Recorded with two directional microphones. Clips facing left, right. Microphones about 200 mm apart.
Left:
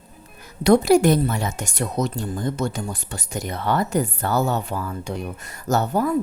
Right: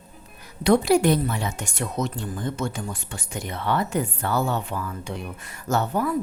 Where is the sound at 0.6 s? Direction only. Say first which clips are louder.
Left 3 dB; 40° left (ahead or behind).